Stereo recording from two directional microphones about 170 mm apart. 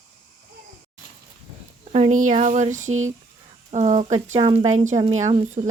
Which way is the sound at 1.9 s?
40° right (ahead or behind).